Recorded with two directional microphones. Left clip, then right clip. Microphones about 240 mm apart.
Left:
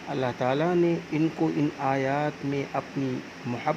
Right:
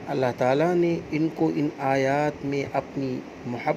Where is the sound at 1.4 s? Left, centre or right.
Left.